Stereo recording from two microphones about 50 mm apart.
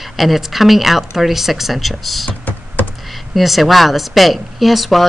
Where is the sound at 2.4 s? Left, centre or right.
Left.